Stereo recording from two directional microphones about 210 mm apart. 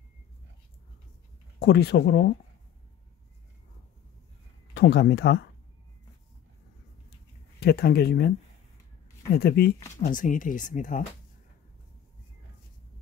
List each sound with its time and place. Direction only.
1.6 s speech: 50° left (ahead or behind)
4.7 s speech: 50° left (ahead or behind)
7.6 s speech: 50° left (ahead or behind)
9.3 s speech: 50° left (ahead or behind)